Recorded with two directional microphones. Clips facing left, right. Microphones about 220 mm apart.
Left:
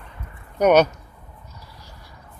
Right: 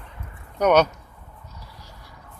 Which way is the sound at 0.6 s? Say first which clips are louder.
Left 2 dB; 10° left (ahead or behind).